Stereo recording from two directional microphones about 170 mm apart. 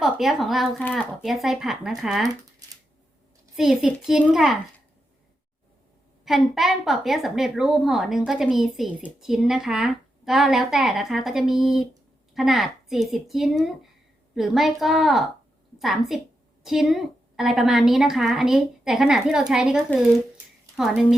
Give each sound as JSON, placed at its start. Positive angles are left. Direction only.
{"t": 0.0, "sound": "a woman's voice", "side_deg": 0}
{"t": 2.6, "sound": "a sound", "side_deg": -20}
{"t": 3.5, "sound": "a woman's voice", "side_deg": -5}
{"t": 6.2, "sound": "a woman's voice", "side_deg": 0}